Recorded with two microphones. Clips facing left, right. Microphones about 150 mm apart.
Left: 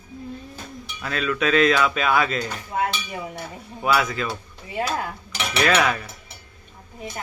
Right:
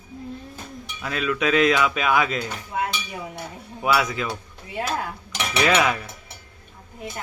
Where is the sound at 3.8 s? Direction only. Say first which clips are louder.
Even; 15° right (ahead or behind).